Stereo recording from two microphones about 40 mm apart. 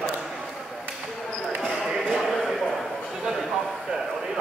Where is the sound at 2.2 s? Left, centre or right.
Centre.